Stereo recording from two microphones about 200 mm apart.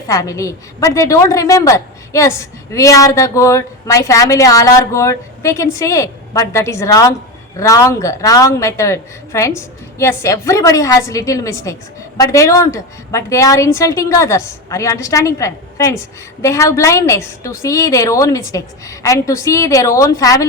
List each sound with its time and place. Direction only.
0.1 s a woman's voice: 15° left (ahead or behind)